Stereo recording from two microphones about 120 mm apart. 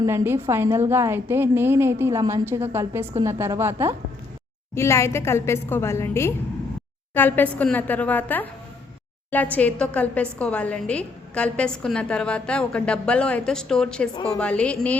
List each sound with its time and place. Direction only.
0.0 s a woman's voice: 20° right (ahead or behind)
4.7 s a woman's voice: 20° left (ahead or behind)